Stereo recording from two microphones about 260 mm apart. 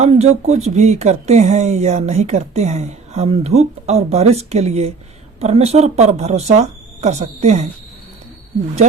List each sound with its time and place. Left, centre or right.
0.0 s speech: right